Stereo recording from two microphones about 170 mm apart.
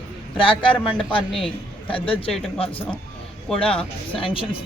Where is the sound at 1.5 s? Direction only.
30° left (ahead or behind).